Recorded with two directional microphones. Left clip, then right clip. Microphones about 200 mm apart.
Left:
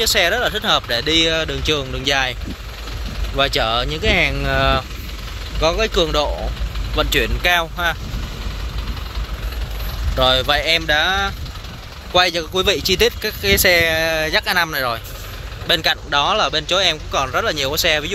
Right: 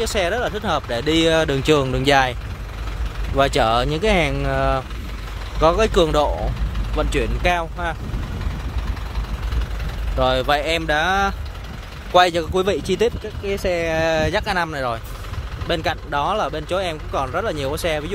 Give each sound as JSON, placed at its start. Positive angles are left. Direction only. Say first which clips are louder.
{"t": 0.0, "sound": "speech", "louder": "left 4 dB", "side_deg": -10}
{"t": 3.3, "sound": "speech", "louder": "right 1 dB", "side_deg": -20}
{"t": 5.6, "sound": "speech", "louder": "right 1 dB", "side_deg": -20}
{"t": 7.0, "sound": "speech", "louder": "left 4 dB", "side_deg": -5}
{"t": 10.1, "sound": "speech", "louder": "left 3 dB", "side_deg": -10}